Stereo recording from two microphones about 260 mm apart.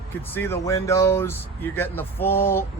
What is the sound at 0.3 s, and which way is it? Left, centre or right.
Speech, centre.